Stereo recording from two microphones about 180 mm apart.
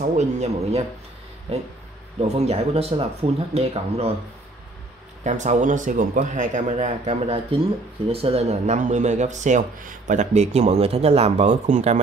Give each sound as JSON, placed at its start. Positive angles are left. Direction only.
{"t": 0.0, "sound": "speech", "side_deg": -40}
{"t": 2.1, "sound": "speech", "side_deg": -35}
{"t": 5.2, "sound": "speech", "side_deg": -40}